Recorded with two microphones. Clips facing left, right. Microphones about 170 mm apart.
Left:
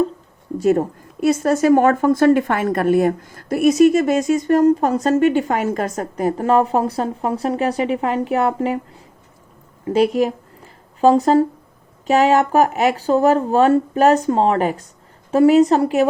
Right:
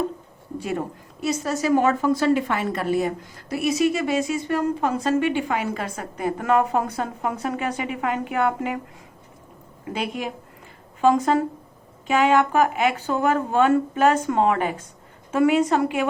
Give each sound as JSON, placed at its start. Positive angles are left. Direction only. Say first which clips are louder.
{"t": 0.6, "sound": "a woman's voice", "louder": "left 12 dB", "side_deg": 45}
{"t": 9.9, "sound": "speech", "louder": "left 12 dB", "side_deg": 40}